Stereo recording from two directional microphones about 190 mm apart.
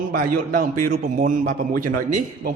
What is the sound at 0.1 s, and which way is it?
A man's voice, 45° right (ahead or behind).